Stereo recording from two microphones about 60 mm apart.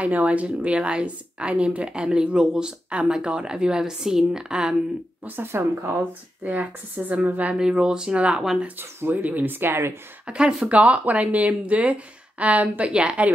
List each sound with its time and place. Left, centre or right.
0.0 s a woman's voice: right
5.2 s speech: right
5.5 s speech: right
5.9 s speech: right
7.5 s a woman's voice: centre
8.6 s speech: right
10.2 s a woman's voice: centre
10.8 s speech: right